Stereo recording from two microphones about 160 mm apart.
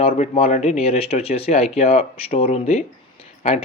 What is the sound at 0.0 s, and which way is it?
Speech, 40° left (ahead or behind).